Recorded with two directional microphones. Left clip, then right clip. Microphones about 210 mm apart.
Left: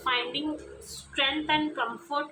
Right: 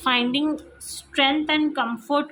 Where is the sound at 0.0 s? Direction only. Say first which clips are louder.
Right 7 dB; 50° right (ahead or behind).